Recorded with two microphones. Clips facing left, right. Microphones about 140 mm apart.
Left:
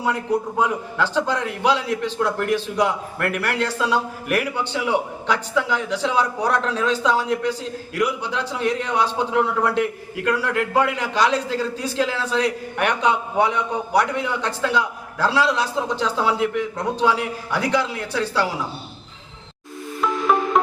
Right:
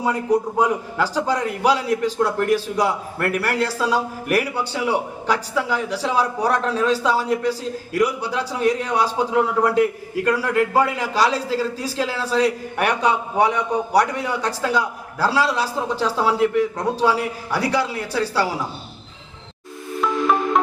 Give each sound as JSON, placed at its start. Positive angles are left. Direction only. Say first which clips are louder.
{"t": 0.0, "sound": "a man's voice", "louder": "right 2 dB", "side_deg": -10}
{"t": 11.3, "sound": "a man's voice", "louder": "left 1 dB", "side_deg": -35}
{"t": 11.5, "sound": "a man's voice", "louder": "even", "side_deg": -5}
{"t": 20.0, "sound": "music", "louder": "even", "side_deg": 0}